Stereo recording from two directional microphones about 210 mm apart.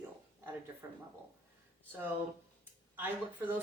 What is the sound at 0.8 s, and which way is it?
Speech, 10° right (ahead or behind).